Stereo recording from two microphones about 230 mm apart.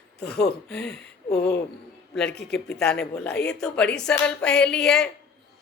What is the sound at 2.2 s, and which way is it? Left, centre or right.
Speech, left.